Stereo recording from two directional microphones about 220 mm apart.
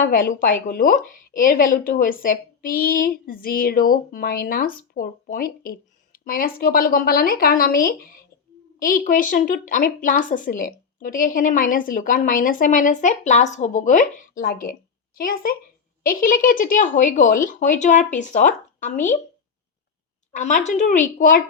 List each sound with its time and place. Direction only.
0.0 s a woman's voice: 40° left (ahead or behind)
20.3 s a woman's voice: 35° left (ahead or behind)